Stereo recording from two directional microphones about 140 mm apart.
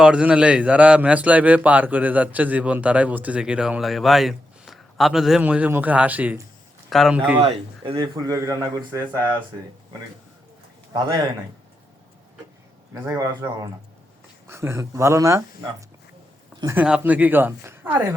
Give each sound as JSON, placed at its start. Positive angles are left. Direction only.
{"t": 0.0, "sound": "a man's voice", "side_deg": -5}
{"t": 6.9, "sound": "speech", "side_deg": 0}
{"t": 7.4, "sound": "speech", "side_deg": -40}
{"t": 7.9, "sound": "a man's voice", "side_deg": -30}
{"t": 12.9, "sound": "a man's voice", "side_deg": -20}
{"t": 16.7, "sound": "a man's voice", "side_deg": -5}